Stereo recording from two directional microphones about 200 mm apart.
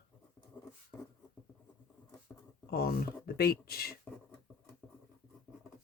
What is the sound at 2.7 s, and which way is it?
Speech, 50° left (ahead or behind).